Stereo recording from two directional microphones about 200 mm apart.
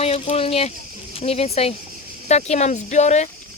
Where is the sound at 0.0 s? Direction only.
30° left (ahead or behind).